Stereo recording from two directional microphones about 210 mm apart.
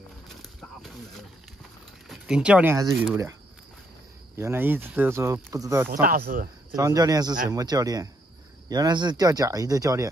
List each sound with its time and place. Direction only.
0.3 s snake: centre (ahead or behind)
2.0 s speech: 5° right (ahead or behind)
4.4 s speech: 10° right (ahead or behind)
5.9 s speech: 45° right (ahead or behind)
6.7 s speech: 15° right (ahead or behind)